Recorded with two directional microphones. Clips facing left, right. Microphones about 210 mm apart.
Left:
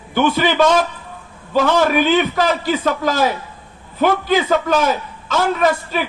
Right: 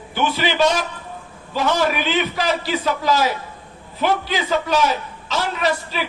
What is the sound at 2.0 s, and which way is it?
A man's voice, 50° left (ahead or behind).